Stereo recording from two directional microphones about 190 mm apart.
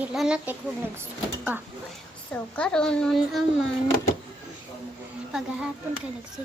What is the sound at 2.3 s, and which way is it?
Speech, 5° left (ahead or behind).